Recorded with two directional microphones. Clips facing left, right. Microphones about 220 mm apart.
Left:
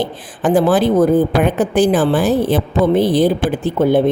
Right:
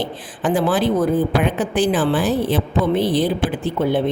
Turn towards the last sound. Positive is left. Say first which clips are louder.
# left 5 dB
turn(degrees=45)  # may be behind; listen again after turning